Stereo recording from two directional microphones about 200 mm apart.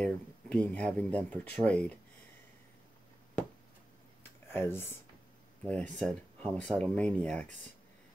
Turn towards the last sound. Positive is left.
turn(degrees=5)  # may be behind; listen again after turning